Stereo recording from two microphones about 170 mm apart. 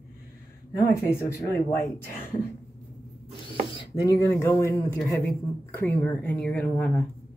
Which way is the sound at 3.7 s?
25° left (ahead or behind).